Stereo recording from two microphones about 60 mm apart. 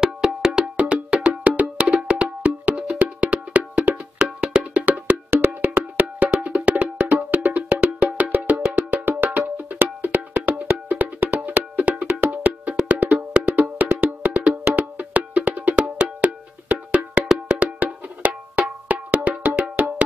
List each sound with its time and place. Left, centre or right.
0.0 s wood block: centre
2.7 s music: right
3.9 s wood block: centre
5.3 s percussion: right
7.0 s wood block: right
8.9 s cowbell: right
10.3 s music: right
12.8 s wood block: right
17.5 s percussion: right
19.3 s wood block: centre